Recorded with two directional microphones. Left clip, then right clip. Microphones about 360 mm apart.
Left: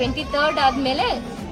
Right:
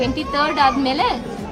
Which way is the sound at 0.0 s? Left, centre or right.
Centre.